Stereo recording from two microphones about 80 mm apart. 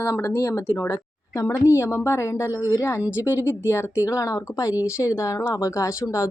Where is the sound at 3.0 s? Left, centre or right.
Centre.